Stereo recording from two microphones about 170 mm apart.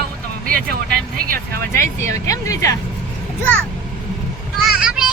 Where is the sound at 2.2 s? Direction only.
20° left (ahead or behind).